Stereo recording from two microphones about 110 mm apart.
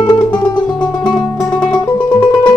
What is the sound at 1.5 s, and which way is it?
Music, 10° left (ahead or behind).